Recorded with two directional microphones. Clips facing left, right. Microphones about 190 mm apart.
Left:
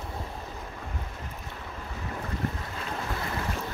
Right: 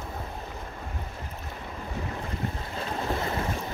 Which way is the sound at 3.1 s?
25° right (ahead or behind).